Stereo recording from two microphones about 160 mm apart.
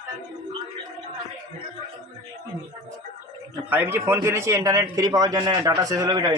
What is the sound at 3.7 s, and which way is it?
A man's voice, 15° right (ahead or behind).